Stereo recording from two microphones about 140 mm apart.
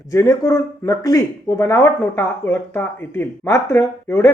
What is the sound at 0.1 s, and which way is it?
Speech, 20° left (ahead or behind).